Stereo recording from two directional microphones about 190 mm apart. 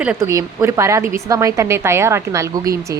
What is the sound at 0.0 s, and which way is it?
A woman's voice, 5° right (ahead or behind).